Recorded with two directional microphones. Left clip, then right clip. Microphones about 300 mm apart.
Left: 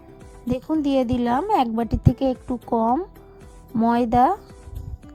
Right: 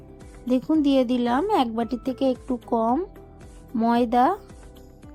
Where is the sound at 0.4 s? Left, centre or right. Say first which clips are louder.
Right 2 dB; left.